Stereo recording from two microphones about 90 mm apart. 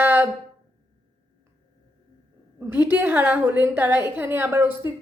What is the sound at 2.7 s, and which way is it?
A woman's voice, 20° right (ahead or behind).